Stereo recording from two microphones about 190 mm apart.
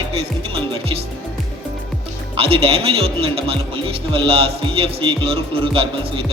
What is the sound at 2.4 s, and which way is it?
Speech, 30° right (ahead or behind).